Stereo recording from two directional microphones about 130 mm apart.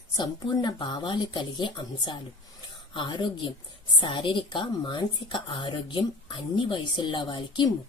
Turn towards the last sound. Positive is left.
turn(degrees=35)  # may be behind; listen again after turning